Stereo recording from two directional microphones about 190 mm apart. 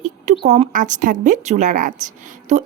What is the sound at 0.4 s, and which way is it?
A woman's voice, 35° right (ahead or behind).